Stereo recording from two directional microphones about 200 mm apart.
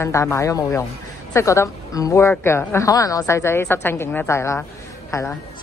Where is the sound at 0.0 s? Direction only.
15° left (ahead or behind).